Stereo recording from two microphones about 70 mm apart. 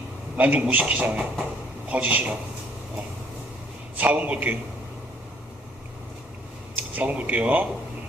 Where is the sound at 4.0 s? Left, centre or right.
Right.